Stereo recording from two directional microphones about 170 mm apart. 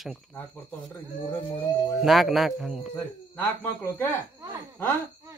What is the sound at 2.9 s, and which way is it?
Speech, 10° left (ahead or behind).